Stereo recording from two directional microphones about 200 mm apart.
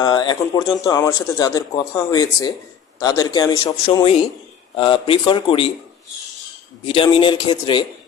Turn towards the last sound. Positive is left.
turn(degrees=25)  # may be behind; listen again after turning